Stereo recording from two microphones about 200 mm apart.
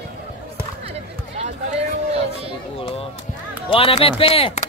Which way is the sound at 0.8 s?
30° right (ahead or behind).